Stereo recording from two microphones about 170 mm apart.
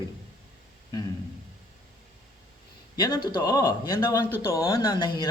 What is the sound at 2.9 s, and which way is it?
Speech, 25° left (ahead or behind).